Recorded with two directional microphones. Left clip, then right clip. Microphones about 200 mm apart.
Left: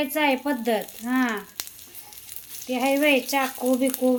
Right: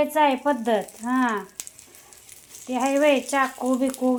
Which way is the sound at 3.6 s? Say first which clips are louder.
Left 1 dB; 5° left (ahead or behind).